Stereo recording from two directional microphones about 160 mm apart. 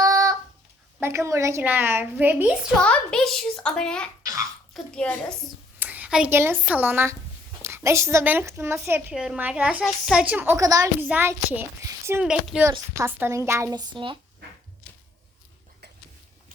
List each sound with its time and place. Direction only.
0.0 s a sound: 20° right (ahead or behind)
1.0 s a child's voice: 20° right (ahead or behind)
2.8 s a woman's voice: 5° left (ahead or behind)
4.2 s babbling: 20° right (ahead or behind)
4.7 s a woman's voice: 5° left (ahead or behind)
5.8 s a child's voice: 10° right (ahead or behind)
9.1 s a child's voice: 5° right (ahead or behind)
12.2 s a woman's voice: 5° right (ahead or behind); by 14.2 s 30° right (ahead or behind)